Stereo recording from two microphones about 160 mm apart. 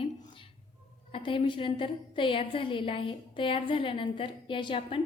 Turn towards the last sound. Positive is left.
turn(degrees=35)  # may be behind; listen again after turning